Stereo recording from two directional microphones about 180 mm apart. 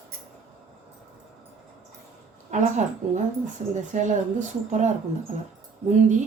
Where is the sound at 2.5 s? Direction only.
40° right (ahead or behind).